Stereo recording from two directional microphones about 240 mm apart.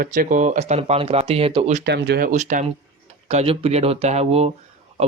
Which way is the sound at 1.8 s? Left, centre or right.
Right.